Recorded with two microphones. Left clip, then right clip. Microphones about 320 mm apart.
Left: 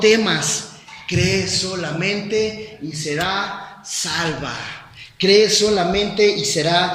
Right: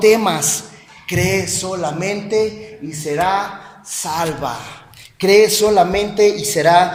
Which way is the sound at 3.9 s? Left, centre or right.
Centre.